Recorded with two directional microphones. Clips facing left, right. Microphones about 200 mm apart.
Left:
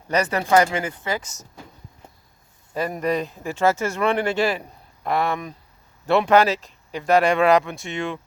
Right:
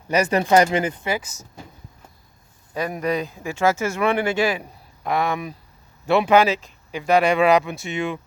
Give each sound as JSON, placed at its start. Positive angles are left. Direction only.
{"t": 0.1, "sound": "speech", "side_deg": -15}
{"t": 2.7, "sound": "speech", "side_deg": 0}